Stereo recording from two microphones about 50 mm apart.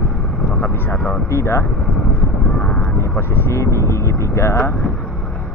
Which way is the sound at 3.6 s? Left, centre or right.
Left.